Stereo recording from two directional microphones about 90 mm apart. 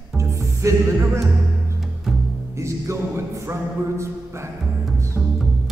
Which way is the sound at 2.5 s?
35° right (ahead or behind).